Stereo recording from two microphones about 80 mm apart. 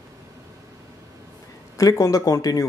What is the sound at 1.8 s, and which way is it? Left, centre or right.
Speech, left.